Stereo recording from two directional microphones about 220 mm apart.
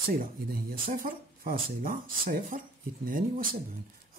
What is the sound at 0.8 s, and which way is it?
Speech, 40° right (ahead or behind).